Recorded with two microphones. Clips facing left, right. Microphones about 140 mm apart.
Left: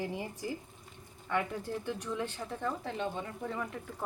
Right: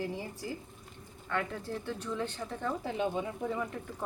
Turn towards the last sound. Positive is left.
turn(degrees=-5)  # may be behind; listen again after turning